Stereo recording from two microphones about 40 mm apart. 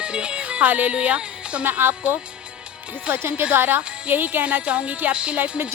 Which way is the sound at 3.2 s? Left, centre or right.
Right.